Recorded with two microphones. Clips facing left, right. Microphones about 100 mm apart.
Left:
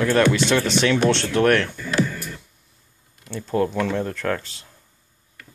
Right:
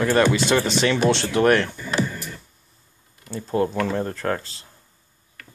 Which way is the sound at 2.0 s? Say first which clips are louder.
Left 1 dB; 20° right (ahead or behind).